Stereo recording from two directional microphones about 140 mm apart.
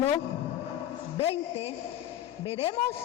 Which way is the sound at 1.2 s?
45° left (ahead or behind).